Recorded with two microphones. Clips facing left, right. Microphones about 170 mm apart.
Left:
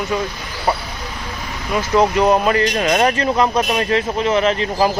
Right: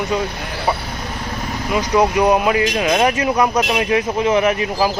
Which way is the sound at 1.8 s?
10° right (ahead or behind).